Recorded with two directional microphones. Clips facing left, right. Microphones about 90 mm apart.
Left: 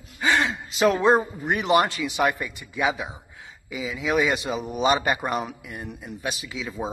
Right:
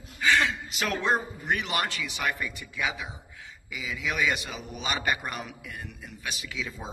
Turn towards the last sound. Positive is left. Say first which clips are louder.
# left 5 dB
turn(degrees=25)  # may be behind; listen again after turning